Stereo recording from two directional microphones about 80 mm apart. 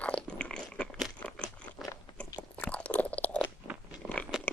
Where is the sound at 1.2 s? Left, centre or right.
Centre.